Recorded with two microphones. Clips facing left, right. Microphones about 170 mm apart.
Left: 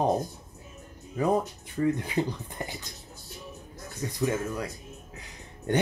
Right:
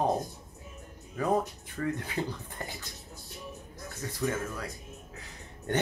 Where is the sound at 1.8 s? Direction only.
20° left (ahead or behind).